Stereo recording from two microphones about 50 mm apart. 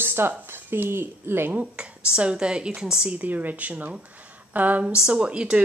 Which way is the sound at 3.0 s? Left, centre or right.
Right.